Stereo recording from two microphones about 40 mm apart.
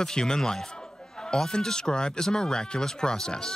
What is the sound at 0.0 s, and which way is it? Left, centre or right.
Speech, centre.